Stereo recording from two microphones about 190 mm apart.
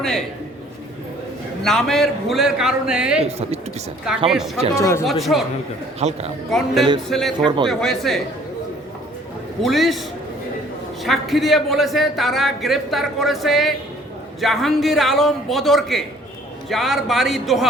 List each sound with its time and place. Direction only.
1.6 s a man's voice: centre (ahead or behind)
4.3 s a man's voice: centre (ahead or behind)
4.7 s speech: 15° left (ahead or behind)
5.2 s a man's voice: centre (ahead or behind)
6.0 s a man's voice: 35° right (ahead or behind)
6.5 s a man's voice: centre (ahead or behind)
7.4 s speech: 25° right (ahead or behind)
7.7 s a man's voice: centre (ahead or behind)
9.6 s a man's voice: centre (ahead or behind)
11.0 s a man's voice: centre (ahead or behind)